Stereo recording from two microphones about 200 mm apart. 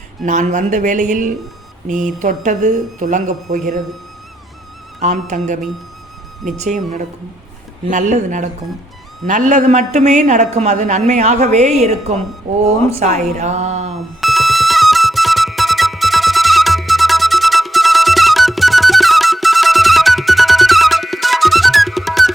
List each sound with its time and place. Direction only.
0.3 s a woman's voice: 40° right (ahead or behind)
4.9 s a woman's voice: 35° right (ahead or behind)
6.6 s a woman's voice: 40° right (ahead or behind)
13.9 s music: centre (ahead or behind)